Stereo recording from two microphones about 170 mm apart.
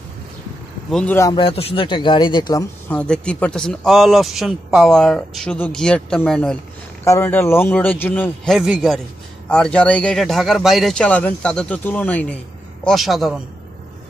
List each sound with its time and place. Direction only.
0.9 s a man's voice: 10° left (ahead or behind)
1.3 s speech: 30° left (ahead or behind)
2.9 s a man's voice: 5° left (ahead or behind)
7.1 s a man's voice: 15° left (ahead or behind)
8.5 s a man's voice: 5° right (ahead or behind)